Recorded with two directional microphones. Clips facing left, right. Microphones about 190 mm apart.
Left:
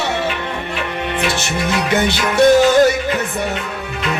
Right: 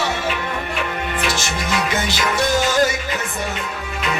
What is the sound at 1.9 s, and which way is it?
Music, 60° left (ahead or behind).